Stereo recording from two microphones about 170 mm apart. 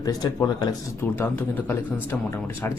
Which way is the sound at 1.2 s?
10° left (ahead or behind).